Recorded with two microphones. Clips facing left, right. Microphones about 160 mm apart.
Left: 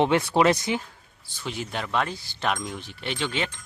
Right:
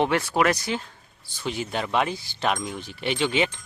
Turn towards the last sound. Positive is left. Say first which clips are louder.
# right 5 dB
turn(degrees=-10)  # may be behind; listen again after turning